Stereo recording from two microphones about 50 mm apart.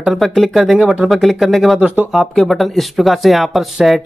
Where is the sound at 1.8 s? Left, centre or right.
Right.